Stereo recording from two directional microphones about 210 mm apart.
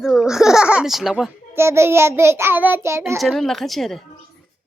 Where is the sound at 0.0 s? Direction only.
Centre (ahead or behind).